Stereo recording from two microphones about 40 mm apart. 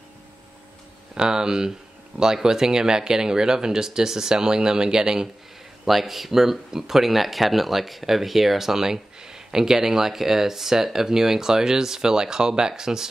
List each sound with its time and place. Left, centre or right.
1.1 s speech: centre
5.9 s speech: centre